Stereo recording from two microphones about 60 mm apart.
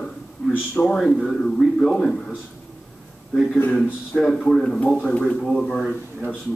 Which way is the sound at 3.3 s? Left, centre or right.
Centre.